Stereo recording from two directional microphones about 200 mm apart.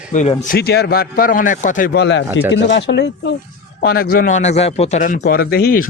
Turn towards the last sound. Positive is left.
turn(degrees=50)  # may be behind; listen again after turning